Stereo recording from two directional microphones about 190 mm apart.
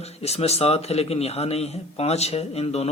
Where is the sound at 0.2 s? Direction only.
30° left (ahead or behind).